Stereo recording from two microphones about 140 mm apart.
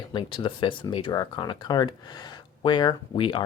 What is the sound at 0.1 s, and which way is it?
Speech, 35° left (ahead or behind).